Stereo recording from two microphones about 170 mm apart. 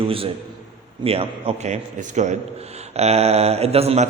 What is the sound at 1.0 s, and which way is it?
A man's voice, 35° right (ahead or behind).